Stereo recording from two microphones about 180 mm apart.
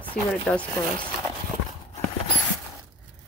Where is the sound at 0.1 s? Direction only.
5° left (ahead or behind).